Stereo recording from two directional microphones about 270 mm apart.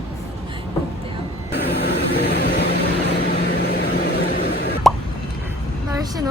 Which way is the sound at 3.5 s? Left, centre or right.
Left.